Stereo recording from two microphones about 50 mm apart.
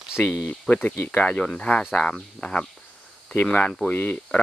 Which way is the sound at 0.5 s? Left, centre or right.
Left.